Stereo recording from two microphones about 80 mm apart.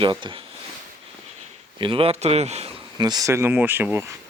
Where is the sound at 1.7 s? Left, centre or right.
Right.